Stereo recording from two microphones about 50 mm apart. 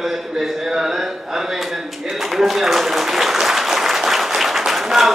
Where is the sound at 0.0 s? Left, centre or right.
Centre.